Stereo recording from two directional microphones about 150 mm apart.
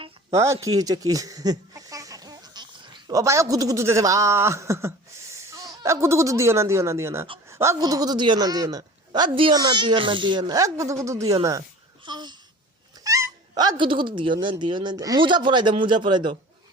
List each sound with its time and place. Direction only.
0.3 s speech: 20° right (ahead or behind)
12.0 s babbling: 30° right (ahead or behind)
13.1 s dog: 20° right (ahead or behind)
13.5 s speech: 30° right (ahead or behind)